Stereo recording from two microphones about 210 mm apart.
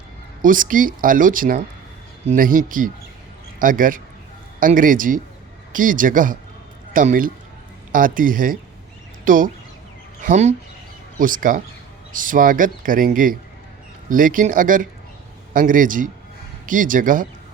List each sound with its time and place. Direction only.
0.4 s speech: 40° right (ahead or behind)